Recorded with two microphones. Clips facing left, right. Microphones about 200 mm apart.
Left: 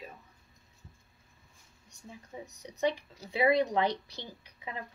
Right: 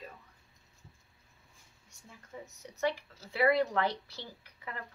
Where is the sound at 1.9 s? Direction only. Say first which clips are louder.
Left 3 dB; 15° left (ahead or behind).